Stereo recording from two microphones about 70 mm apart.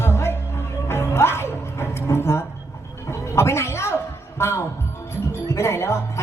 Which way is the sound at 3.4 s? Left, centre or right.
Left.